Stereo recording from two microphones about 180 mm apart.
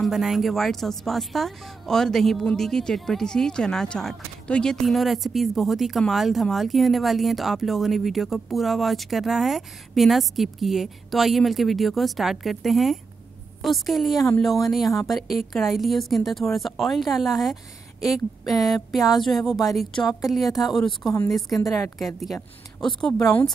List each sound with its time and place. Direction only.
0.0 s speech: centre (ahead or behind)
23.2 s speech: 20° left (ahead or behind)